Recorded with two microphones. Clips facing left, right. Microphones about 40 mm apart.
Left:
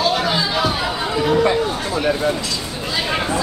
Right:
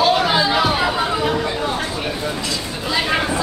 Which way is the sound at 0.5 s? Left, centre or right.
Centre.